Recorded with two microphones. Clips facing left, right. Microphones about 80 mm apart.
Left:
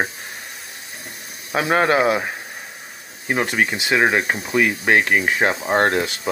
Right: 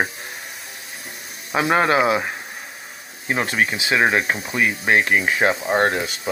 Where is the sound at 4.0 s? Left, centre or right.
Left.